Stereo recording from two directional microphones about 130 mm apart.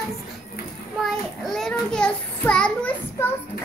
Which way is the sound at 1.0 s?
Centre (ahead or behind).